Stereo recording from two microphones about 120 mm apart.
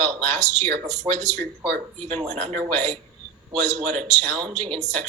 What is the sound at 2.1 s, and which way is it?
Speech, 60° right (ahead or behind).